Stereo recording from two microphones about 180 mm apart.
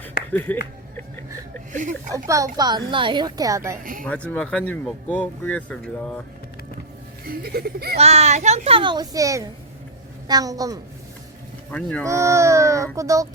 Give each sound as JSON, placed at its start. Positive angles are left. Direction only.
{"t": 0.3, "sound": "speech", "side_deg": 10}
{"t": 1.7, "sound": "speech", "side_deg": -45}
{"t": 2.1, "sound": "a woman's voice", "side_deg": -20}
{"t": 4.0, "sound": "speech", "side_deg": 5}
{"t": 7.3, "sound": "speech", "side_deg": -60}
{"t": 7.9, "sound": "a child's voice", "side_deg": -35}
{"t": 11.7, "sound": "speech", "side_deg": 5}
{"t": 12.0, "sound": "speech", "side_deg": -15}